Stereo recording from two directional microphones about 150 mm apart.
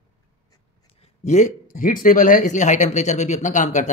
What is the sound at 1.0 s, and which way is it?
A man's voice, 50° left (ahead or behind).